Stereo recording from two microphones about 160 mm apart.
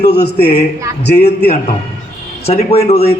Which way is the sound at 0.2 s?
45° left (ahead or behind).